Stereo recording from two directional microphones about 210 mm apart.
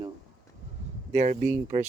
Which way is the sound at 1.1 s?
35° right (ahead or behind).